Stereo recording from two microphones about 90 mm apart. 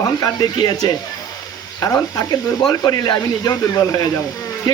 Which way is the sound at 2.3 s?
45° left (ahead or behind).